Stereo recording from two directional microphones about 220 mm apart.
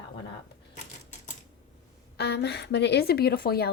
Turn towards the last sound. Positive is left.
turn(degrees=45)  # may be behind; listen again after turning